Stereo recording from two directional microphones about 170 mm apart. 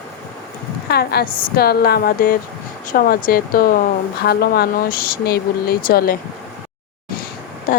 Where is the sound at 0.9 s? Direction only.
70° left (ahead or behind).